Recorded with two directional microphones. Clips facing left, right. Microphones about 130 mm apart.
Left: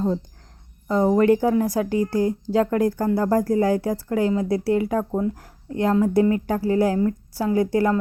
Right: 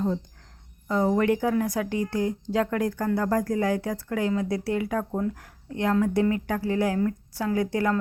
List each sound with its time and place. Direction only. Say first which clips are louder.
0.9 s speech: left 5 dB; 35° left (ahead or behind)